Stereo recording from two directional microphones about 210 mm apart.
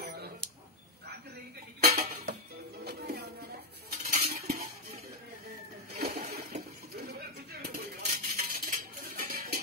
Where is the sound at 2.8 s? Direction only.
50° right (ahead or behind).